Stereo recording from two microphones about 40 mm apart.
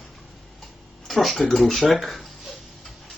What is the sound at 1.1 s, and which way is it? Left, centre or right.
Speech, centre.